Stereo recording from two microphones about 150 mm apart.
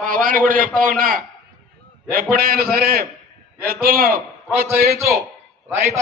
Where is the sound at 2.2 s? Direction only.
75° right (ahead or behind).